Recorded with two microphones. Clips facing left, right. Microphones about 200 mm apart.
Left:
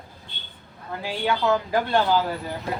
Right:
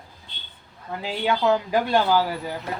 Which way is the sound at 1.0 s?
20° right (ahead or behind).